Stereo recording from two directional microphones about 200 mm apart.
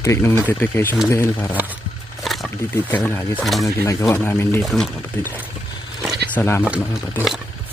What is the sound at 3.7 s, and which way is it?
Speech, 15° left (ahead or behind).